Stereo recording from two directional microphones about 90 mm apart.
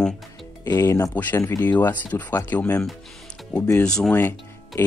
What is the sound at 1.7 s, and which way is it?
Speech, 20° left (ahead or behind).